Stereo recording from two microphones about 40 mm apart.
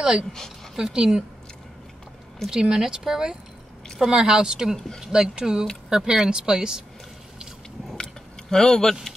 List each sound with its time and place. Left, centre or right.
0.7 s speech: centre
2.5 s speech: centre
4.7 s speech: centre
5.0 s speech: centre
8.0 s a sound: centre